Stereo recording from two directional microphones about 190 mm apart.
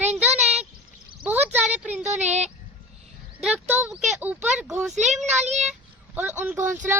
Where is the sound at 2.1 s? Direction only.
35° right (ahead or behind).